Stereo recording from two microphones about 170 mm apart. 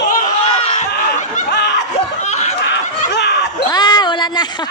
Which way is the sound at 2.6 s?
90° left.